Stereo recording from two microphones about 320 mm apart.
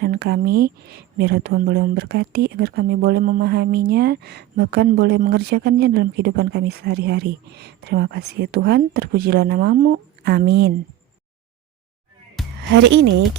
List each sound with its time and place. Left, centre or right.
0.0 s speech: right
12.4 s music: centre
12.7 s speech: right